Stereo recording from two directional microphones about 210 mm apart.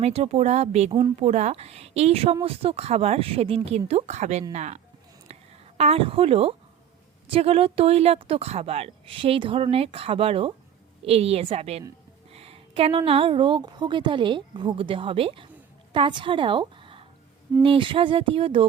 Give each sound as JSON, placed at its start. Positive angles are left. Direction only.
{"t": 0.0, "sound": "a woman's voice", "side_deg": -30}
{"t": 5.3, "sound": "a sound", "side_deg": -30}
{"t": 7.3, "sound": "a woman's voice", "side_deg": -25}